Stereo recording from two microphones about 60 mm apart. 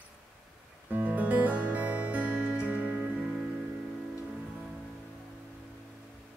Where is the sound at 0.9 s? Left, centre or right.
Right.